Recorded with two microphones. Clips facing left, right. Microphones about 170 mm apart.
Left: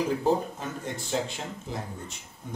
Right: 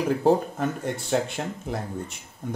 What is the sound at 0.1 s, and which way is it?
Speech, 60° right (ahead or behind).